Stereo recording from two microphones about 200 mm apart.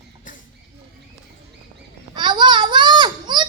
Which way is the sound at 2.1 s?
20° right (ahead or behind).